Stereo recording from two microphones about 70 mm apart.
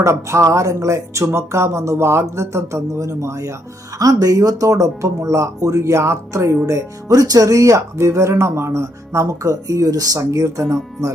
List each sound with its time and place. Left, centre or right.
0.0 s speech: right
6.7 s speech: right